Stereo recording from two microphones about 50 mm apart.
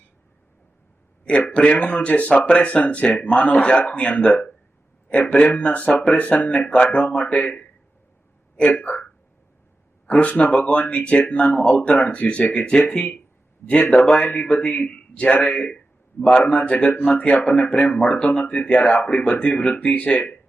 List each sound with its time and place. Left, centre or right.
1.2 s a man's voice: left
10.1 s a man's voice: left
13.9 s a man's voice: centre